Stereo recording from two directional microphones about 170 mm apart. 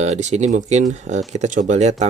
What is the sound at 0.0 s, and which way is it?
Speech, 40° right (ahead or behind).